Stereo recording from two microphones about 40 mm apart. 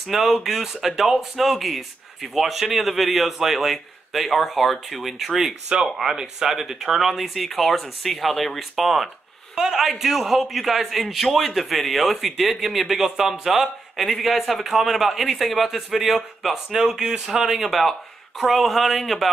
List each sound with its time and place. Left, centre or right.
0.0 s speech: centre
5.7 s a man's voice: centre
16.8 s a man's voice: centre